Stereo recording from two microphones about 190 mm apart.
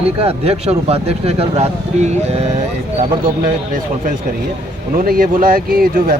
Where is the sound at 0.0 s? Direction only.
30° right (ahead or behind).